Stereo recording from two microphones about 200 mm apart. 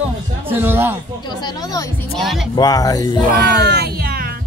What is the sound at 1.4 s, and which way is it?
Speech, 20° left (ahead or behind).